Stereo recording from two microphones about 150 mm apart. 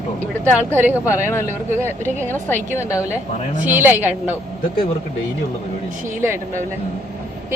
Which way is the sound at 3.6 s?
10° right (ahead or behind).